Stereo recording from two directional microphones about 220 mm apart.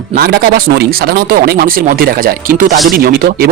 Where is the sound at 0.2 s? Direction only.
45° right (ahead or behind).